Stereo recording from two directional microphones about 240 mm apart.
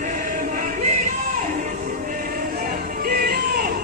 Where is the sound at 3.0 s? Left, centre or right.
Right.